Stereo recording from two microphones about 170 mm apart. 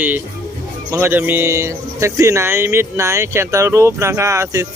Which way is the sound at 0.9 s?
15° right (ahead or behind).